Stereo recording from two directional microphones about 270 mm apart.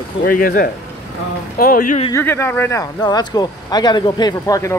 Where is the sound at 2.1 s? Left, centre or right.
Centre.